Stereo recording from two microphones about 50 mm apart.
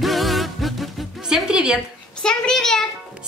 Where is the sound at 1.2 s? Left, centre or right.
Centre.